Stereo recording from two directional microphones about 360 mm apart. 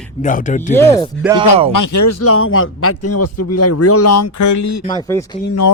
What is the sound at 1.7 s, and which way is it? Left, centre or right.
Speech, left.